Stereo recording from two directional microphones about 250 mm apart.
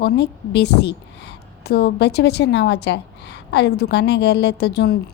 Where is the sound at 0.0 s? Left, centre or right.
Left.